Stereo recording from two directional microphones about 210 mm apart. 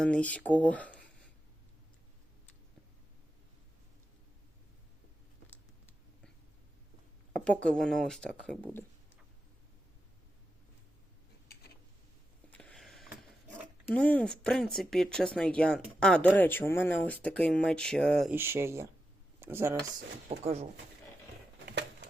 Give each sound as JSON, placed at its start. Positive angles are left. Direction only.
{"t": 0.0, "sound": "speech", "side_deg": 5}
{"t": 7.3, "sound": "speech", "side_deg": 5}
{"t": 12.5, "sound": "a sound", "side_deg": 5}
{"t": 13.9, "sound": "speech", "side_deg": 5}
{"t": 18.3, "sound": "speech", "side_deg": -10}
{"t": 20.3, "sound": "speech", "side_deg": -30}